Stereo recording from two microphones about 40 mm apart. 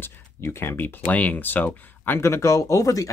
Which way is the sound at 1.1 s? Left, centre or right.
Left.